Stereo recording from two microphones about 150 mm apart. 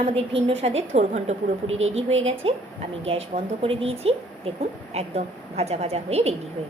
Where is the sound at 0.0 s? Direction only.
40° right (ahead or behind).